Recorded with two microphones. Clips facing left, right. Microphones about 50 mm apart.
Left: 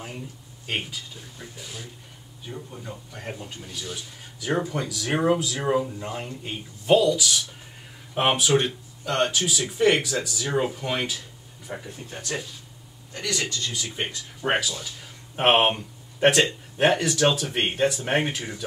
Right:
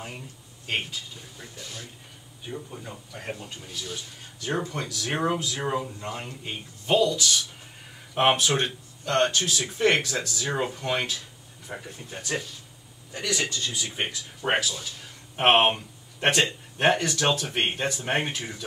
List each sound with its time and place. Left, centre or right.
1.6 s speech: centre
2.5 s speech: centre
13.1 s a man's voice: centre
14.4 s speech: centre